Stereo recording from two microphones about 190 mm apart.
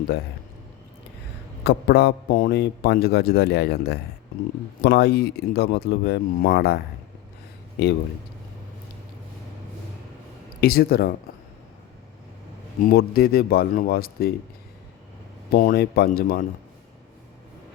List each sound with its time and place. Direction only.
1.6 s a man's voice: 60° left (ahead or behind)
10.6 s speech: 55° left (ahead or behind)
12.9 s speech: 55° left (ahead or behind)
15.5 s speech: 55° left (ahead or behind)